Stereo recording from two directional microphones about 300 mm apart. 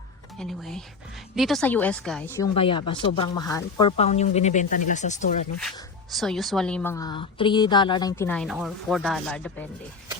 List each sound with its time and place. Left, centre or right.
0.3 s a woman's voice: centre
2.6 s speech: centre
6.1 s a woman's voice: centre